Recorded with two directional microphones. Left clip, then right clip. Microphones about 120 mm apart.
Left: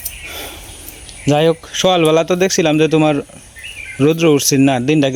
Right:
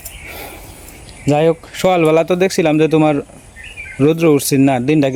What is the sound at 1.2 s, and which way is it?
Speech, centre (ahead or behind).